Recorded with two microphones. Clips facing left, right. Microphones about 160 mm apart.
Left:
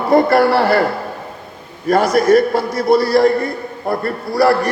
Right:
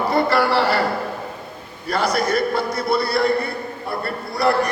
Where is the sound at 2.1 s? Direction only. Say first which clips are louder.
Left 9 dB; 45° left (ahead or behind).